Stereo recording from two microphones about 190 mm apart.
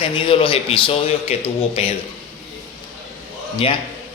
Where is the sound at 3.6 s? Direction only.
30° left (ahead or behind).